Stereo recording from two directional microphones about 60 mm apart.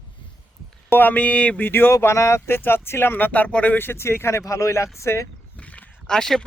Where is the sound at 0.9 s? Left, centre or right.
Left.